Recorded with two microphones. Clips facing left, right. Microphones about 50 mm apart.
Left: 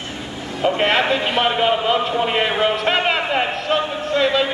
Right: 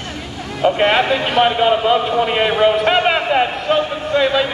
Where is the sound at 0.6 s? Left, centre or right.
Centre.